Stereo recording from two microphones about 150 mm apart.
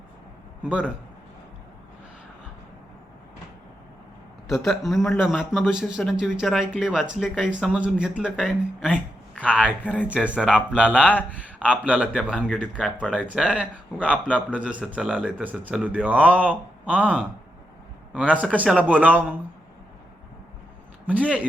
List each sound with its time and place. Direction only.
0.6 s a man's voice: 10° right (ahead or behind)
4.4 s speech: centre (ahead or behind)
9.4 s a man's voice: 10° right (ahead or behind)
21.1 s a man's voice: 10° right (ahead or behind)